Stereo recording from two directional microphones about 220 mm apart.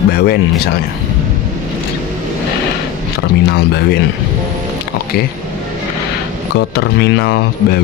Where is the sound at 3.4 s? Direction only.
45° left (ahead or behind).